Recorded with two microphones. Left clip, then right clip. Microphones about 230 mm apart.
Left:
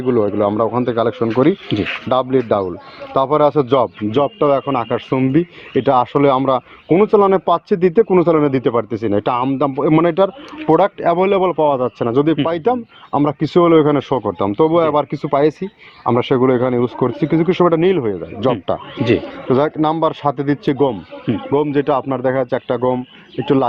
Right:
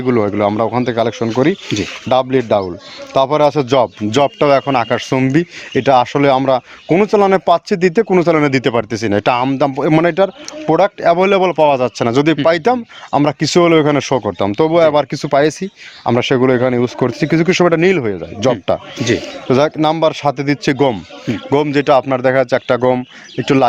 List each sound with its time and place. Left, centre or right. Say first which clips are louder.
0.0 s speech: right 1 dB; right